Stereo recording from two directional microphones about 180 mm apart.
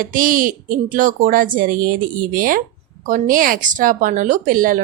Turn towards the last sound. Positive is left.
turn(degrees=-50)  # may be behind; listen again after turning